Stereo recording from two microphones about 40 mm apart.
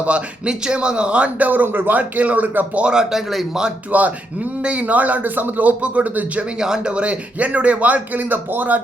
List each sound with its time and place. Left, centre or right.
0.4 s a man's voice: right
1.4 s speech: right
2.0 s speech: right
2.8 s speech: centre
3.2 s speech: centre
3.9 s speech: right
4.6 s speech: right
6.6 s speech: centre
6.9 s speech: right